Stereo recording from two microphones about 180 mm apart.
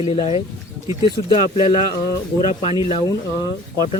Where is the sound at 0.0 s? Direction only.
30° left (ahead or behind).